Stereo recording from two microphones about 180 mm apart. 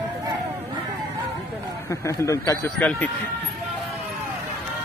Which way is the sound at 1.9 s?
15° left (ahead or behind).